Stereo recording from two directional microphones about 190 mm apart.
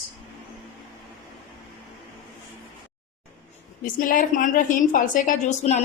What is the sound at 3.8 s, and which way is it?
A woman's voice, 45° left (ahead or behind).